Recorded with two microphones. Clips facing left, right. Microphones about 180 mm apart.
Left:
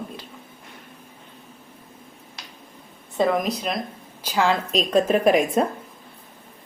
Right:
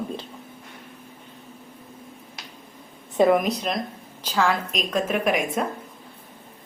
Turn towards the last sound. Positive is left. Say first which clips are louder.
# left 5 dB
turn(degrees=35)  # may be behind; listen again after turning